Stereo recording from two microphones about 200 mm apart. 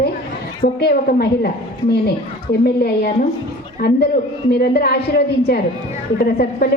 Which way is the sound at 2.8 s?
55° left (ahead or behind).